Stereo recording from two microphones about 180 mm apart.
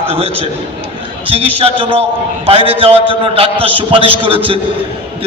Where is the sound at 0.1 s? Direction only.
35° right (ahead or behind).